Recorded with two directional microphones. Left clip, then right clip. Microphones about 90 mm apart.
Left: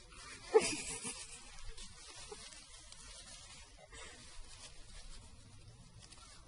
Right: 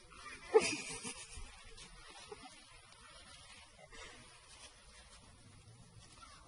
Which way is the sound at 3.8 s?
Centre (ahead or behind).